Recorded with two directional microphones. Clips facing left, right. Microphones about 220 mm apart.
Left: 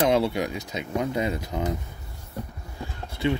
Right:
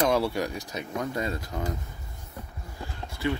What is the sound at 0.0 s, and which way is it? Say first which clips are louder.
Speech: left 3 dB; 20° left (ahead or behind).